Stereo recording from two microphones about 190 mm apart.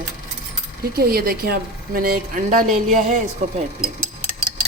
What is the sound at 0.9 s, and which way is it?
A woman's voice, 55° right (ahead or behind).